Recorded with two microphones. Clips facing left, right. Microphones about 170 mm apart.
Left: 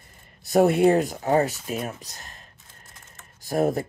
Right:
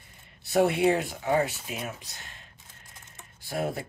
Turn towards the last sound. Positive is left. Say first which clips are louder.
# left 8 dB
turn(degrees=45)  # may be behind; listen again after turning